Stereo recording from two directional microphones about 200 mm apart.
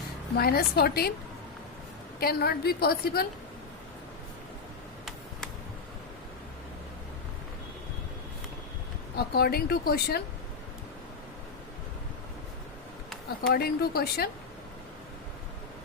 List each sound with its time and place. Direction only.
0.3 s speech: 50° left (ahead or behind)
2.1 s speech: 50° left (ahead or behind)
9.1 s speech: 50° left (ahead or behind)
13.5 s speech: 50° left (ahead or behind)